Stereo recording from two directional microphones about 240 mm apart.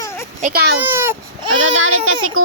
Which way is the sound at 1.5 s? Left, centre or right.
Right.